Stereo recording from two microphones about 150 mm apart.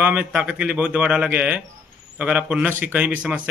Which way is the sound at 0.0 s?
10° right (ahead or behind).